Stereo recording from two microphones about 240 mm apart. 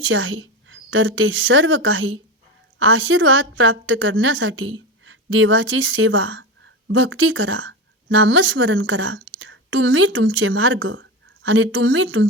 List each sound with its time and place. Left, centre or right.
0.0 s a woman's voice: right